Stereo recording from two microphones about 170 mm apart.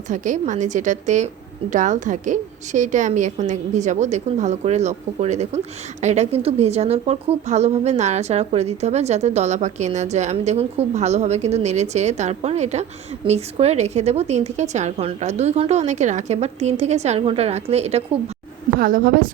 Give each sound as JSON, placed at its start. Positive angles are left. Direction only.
{"t": 0.1, "sound": "a woman's voice", "side_deg": -45}
{"t": 18.8, "sound": "a woman's voice", "side_deg": -60}